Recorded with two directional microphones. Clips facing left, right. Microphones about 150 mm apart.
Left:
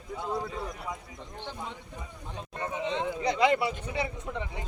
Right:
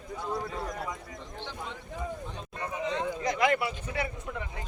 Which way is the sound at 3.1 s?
15° left (ahead or behind).